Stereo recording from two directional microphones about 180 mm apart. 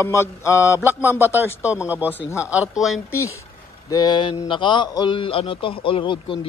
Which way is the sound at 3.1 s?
15° left (ahead or behind).